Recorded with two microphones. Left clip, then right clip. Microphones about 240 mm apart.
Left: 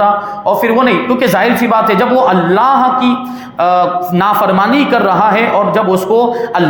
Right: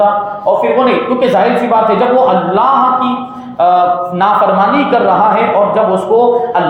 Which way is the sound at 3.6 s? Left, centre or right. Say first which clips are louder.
Right 2 dB; left.